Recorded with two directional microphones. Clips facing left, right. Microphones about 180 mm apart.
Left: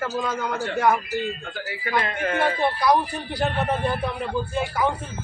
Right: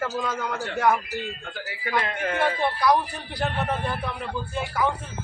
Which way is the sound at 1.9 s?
5° right (ahead or behind).